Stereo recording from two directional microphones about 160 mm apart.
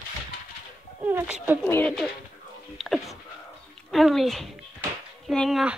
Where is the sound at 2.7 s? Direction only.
Centre (ahead or behind).